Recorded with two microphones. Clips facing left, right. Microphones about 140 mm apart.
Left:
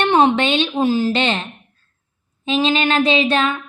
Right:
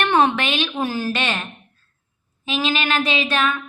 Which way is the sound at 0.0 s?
20° left (ahead or behind).